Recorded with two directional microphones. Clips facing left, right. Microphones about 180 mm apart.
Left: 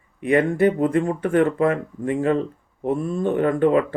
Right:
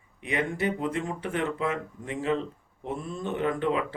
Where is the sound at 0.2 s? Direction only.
50° left (ahead or behind).